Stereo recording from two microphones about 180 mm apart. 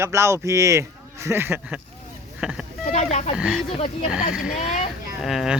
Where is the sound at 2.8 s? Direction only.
40° left (ahead or behind).